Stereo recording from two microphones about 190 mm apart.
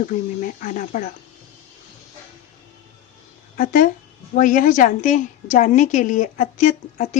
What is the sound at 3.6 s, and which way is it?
A woman's voice, 45° left (ahead or behind).